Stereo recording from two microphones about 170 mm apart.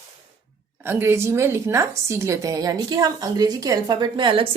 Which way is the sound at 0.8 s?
15° right (ahead or behind).